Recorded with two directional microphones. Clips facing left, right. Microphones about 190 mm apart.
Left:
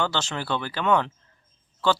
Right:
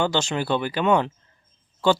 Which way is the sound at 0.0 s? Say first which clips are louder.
Right 5 dB; 15° right (ahead or behind).